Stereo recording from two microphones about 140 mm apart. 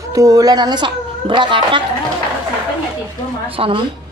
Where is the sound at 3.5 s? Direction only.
40° right (ahead or behind).